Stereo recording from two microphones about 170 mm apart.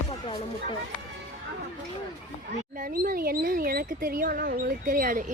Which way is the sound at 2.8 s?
55° right (ahead or behind).